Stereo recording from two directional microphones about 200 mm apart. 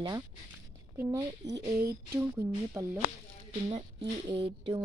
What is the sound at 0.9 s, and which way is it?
Speech, 15° right (ahead or behind).